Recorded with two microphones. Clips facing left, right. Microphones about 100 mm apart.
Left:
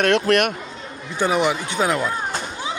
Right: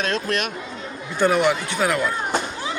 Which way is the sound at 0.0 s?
60° left (ahead or behind).